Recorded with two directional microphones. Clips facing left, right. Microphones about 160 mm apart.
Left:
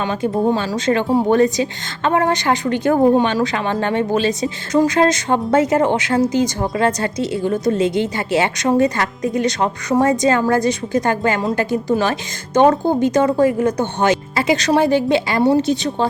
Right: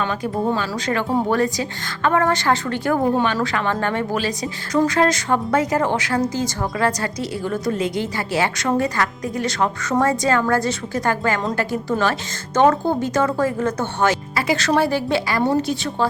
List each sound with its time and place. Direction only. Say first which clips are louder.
0.0 s speech: left 4 dB; 25° left (ahead or behind)